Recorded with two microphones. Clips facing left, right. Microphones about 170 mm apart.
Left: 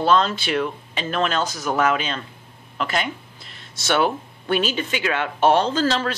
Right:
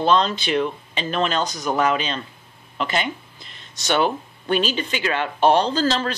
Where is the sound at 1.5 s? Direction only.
15° right (ahead or behind).